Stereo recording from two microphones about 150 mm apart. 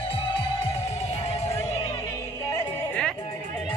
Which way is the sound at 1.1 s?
40° left (ahead or behind).